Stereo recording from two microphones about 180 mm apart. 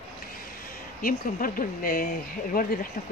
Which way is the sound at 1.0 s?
50° left (ahead or behind).